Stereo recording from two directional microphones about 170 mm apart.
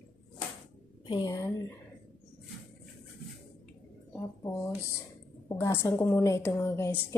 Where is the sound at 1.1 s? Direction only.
25° left (ahead or behind).